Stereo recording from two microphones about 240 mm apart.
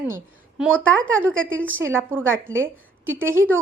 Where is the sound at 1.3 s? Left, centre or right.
Right.